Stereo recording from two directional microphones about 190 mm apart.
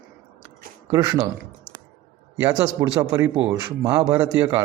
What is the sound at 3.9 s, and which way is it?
Speech, 15° right (ahead or behind).